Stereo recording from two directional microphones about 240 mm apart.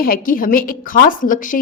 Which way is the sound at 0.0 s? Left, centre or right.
Left.